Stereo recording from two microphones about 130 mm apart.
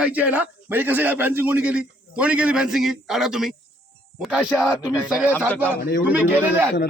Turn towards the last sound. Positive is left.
turn(degrees=-15)  # may be behind; listen again after turning